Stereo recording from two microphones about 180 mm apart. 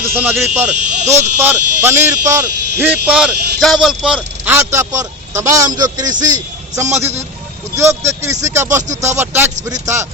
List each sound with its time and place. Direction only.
0.1 s speech: 10° right (ahead or behind)